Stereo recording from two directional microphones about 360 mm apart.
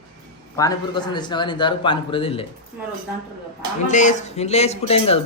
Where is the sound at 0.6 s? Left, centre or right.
Centre.